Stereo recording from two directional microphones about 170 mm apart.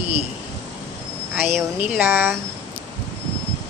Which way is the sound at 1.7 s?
10° right (ahead or behind).